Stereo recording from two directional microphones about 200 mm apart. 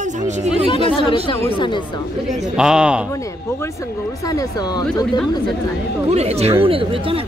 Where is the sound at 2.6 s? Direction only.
5° right (ahead or behind).